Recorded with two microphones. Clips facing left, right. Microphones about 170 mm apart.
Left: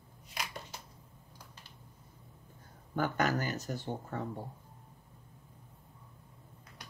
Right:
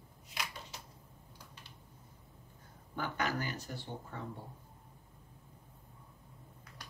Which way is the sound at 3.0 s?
45° left (ahead or behind).